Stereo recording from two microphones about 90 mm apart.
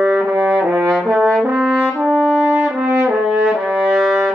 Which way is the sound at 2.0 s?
5° right (ahead or behind).